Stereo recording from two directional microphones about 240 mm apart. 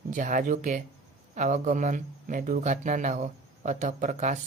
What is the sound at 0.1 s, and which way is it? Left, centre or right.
Speech, right.